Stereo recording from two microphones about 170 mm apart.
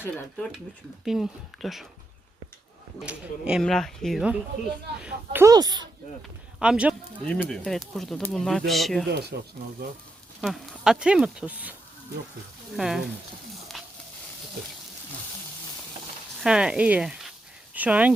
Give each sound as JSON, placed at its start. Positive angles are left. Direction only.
{"t": 0.0, "sound": "speech", "side_deg": 10}
{"t": 1.0, "sound": "speech", "side_deg": 0}
{"t": 3.0, "sound": "speech", "side_deg": -5}
{"t": 5.0, "sound": "speech", "side_deg": -15}
{"t": 6.6, "sound": "speech", "side_deg": -5}
{"t": 7.3, "sound": "speech", "side_deg": 5}
{"t": 9.0, "sound": "speech", "side_deg": -80}
{"t": 10.4, "sound": "speech", "side_deg": 0}
{"t": 13.7, "sound": "a sound", "side_deg": 0}
{"t": 16.4, "sound": "speech", "side_deg": -5}